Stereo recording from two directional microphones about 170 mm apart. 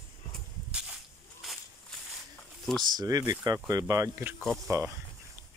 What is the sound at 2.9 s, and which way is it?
Speech, 20° right (ahead or behind).